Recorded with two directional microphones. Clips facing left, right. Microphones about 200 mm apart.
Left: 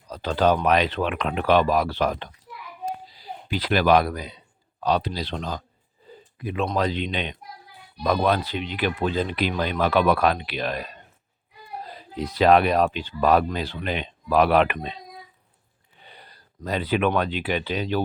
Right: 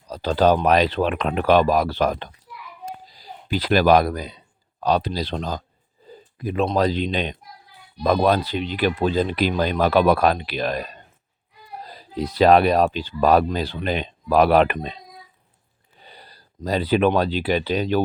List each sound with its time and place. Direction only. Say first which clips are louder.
0.1 s speech: right 3 dB; 35° right (ahead or behind)
11.9 s speech: right 4 dB; 35° right (ahead or behind)
16.0 s a sound: right 2 dB; 35° right (ahead or behind)
16.6 s speech: right 4 dB; 35° right (ahead or behind)